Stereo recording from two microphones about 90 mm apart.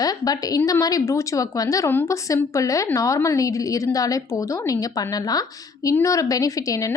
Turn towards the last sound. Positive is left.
turn(degrees=40)  # may be behind; listen again after turning